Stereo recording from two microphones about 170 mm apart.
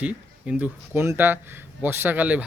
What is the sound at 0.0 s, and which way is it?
Speech, 10° right (ahead or behind).